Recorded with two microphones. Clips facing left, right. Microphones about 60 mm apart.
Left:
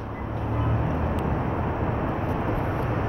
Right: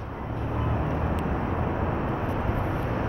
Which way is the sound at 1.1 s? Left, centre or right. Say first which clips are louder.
Left 1 dB; centre.